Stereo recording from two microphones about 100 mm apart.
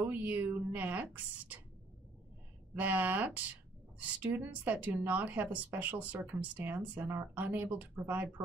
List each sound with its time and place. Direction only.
0.0 s speech: 15° right (ahead or behind)
2.7 s speech: 15° right (ahead or behind)